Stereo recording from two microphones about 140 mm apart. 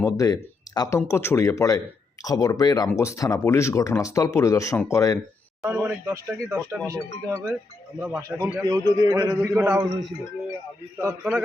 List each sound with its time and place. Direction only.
0.0 s speech: 25° left (ahead or behind)
5.6 s a man's voice: 10° right (ahead or behind)
11.0 s speech: 10° right (ahead or behind)